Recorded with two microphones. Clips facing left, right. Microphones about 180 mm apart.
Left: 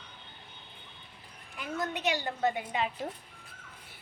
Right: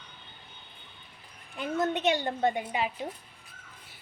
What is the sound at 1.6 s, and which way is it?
A woman's voice, 25° right (ahead or behind).